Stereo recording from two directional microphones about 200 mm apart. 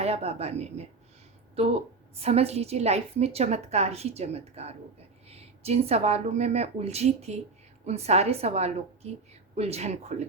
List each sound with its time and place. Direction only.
0.0 s a woman's voice: 30° right (ahead or behind)